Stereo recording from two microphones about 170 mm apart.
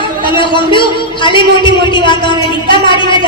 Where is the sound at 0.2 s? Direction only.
30° left (ahead or behind).